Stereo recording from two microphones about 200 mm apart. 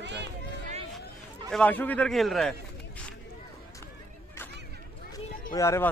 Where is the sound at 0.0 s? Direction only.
60° right (ahead or behind).